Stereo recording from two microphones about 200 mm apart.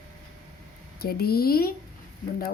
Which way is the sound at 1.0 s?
50° left (ahead or behind).